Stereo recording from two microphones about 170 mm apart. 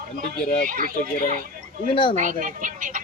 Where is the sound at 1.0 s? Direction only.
55° left (ahead or behind).